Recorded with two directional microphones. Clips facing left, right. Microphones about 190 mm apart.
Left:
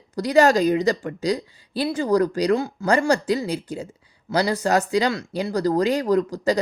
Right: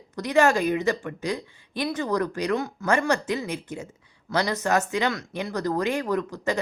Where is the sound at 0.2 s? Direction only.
35° left (ahead or behind).